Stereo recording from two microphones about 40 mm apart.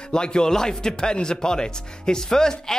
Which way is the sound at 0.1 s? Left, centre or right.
Left.